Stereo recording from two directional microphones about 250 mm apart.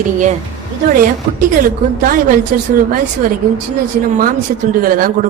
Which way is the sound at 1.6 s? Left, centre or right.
Right.